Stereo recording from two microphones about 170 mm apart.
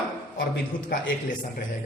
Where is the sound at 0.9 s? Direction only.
60° left (ahead or behind).